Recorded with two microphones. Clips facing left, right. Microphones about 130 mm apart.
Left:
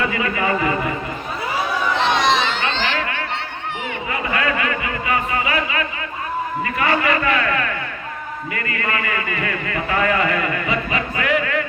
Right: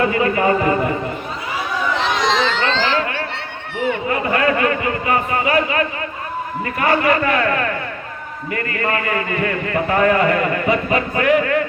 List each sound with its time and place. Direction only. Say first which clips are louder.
0.1 s a man's voice: right 5 dB; 40° right (ahead or behind)
2.2 s a sound: right 1 dB; 90° right
4.1 s a man's voice: right 2 dB; 45° right (ahead or behind)